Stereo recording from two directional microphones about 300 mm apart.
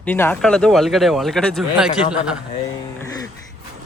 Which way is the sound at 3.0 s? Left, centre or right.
Centre.